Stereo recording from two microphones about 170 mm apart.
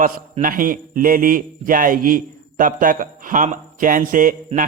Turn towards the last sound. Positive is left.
turn(degrees=-55)  # may be behind; listen again after turning